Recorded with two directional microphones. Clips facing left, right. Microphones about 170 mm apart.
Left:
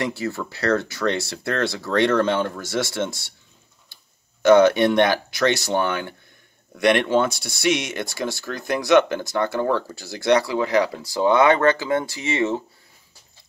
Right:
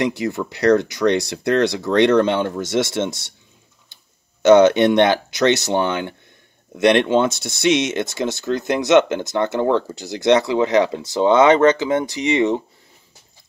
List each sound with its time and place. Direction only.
0.0 s speech: 15° right (ahead or behind)